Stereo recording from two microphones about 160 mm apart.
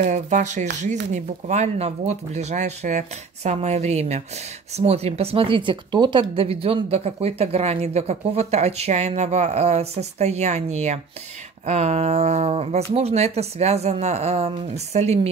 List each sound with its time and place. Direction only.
0.0 s speech: 50° right (ahead or behind)